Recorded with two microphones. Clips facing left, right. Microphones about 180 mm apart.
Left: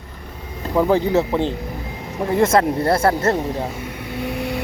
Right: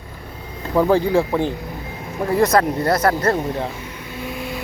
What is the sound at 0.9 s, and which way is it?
Speech, 20° left (ahead or behind).